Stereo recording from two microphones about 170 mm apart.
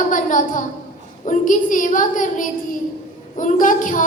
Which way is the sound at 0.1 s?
50° left (ahead or behind).